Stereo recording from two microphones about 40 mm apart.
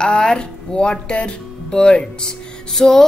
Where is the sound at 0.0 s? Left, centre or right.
Centre.